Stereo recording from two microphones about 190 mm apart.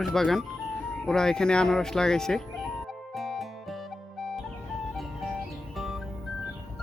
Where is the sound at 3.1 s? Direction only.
Centre (ahead or behind).